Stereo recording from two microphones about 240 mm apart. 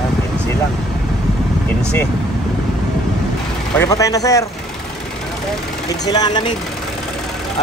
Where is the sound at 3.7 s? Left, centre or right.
Centre.